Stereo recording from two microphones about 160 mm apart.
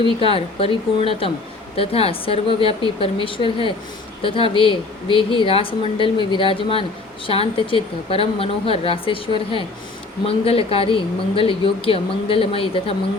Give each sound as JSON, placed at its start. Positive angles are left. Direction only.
{"t": 0.0, "sound": "a woman's voice", "side_deg": 35}